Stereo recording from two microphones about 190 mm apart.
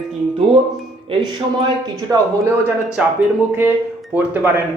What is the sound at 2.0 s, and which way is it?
Speech, 15° right (ahead or behind).